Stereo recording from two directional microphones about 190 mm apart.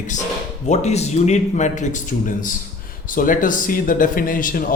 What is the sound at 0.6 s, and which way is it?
A man's voice, 35° left (ahead or behind).